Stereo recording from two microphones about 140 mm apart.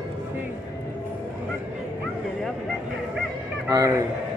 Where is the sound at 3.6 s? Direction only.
25° right (ahead or behind).